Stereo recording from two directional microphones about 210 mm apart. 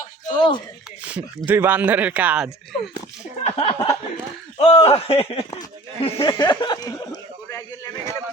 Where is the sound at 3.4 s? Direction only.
25° left (ahead or behind).